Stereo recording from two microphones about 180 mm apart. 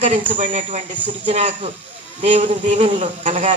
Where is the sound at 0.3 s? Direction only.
45° right (ahead or behind).